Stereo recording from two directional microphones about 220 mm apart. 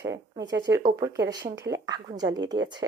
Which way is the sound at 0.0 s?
15° right (ahead or behind).